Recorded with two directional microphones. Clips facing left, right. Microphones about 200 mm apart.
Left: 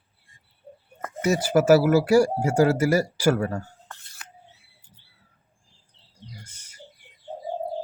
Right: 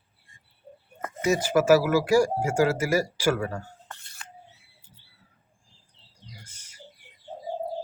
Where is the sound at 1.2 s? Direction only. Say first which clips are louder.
Left 2 dB; 40° left (ahead or behind).